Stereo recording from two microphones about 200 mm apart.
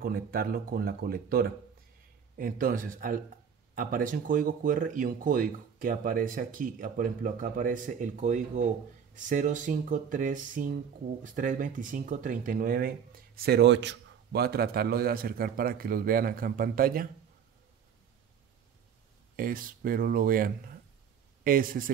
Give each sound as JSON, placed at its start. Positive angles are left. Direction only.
{"t": 0.0, "sound": "speech", "side_deg": -45}
{"t": 19.3, "sound": "speech", "side_deg": -45}